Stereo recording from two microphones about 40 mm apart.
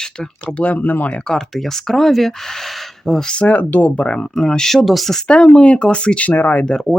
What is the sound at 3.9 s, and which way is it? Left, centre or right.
Speech, left.